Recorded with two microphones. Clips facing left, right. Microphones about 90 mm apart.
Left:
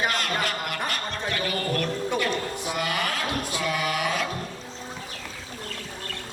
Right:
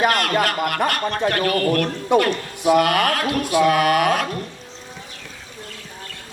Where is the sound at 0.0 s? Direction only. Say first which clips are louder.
Right 8 dB; 60° right (ahead or behind).